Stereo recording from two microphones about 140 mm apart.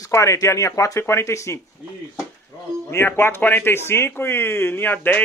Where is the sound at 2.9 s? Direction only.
15° left (ahead or behind).